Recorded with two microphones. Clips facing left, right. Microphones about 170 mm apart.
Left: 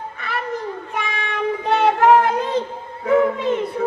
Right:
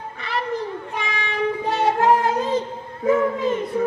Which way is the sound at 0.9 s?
50° left (ahead or behind).